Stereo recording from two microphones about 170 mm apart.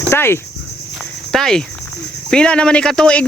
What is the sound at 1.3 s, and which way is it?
Speech, centre (ahead or behind).